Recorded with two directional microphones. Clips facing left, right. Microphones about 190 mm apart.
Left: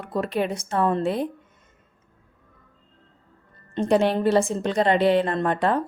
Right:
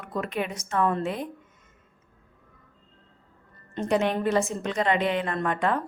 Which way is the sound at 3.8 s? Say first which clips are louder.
Left 4 dB; 30° left (ahead or behind).